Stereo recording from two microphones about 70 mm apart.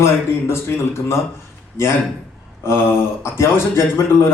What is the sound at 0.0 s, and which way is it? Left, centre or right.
A man's voice, left.